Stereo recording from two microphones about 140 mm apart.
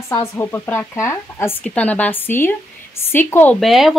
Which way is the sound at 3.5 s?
Centre (ahead or behind).